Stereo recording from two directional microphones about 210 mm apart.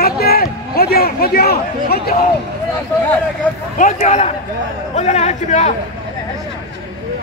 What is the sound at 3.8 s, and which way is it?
A man's voice, 35° left (ahead or behind).